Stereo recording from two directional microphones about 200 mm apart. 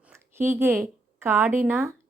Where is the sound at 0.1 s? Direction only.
10° right (ahead or behind).